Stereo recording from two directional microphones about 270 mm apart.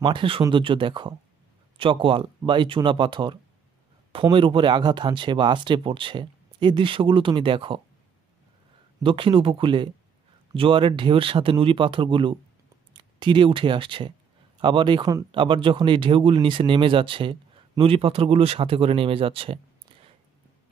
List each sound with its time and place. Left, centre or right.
0.0 s speech: centre
9.0 s speech: centre